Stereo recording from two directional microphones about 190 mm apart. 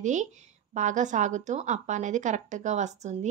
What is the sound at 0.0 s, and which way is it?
Speech, 40° right (ahead or behind).